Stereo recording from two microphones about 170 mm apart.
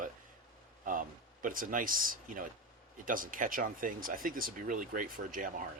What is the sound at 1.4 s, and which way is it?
Speech, 55° right (ahead or behind).